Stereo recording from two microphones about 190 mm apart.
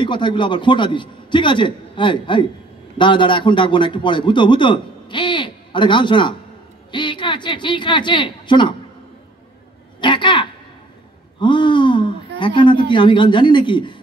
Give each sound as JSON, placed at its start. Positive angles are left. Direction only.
{"t": 0.0, "sound": "a man's voice", "side_deg": 25}
{"t": 9.9, "sound": "a sound", "side_deg": 25}
{"t": 12.4, "sound": "a man's voice", "side_deg": 25}